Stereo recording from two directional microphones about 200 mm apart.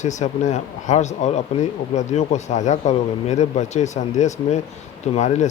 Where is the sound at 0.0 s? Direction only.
35° left (ahead or behind).